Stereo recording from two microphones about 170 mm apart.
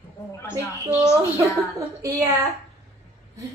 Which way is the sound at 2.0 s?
20° right (ahead or behind).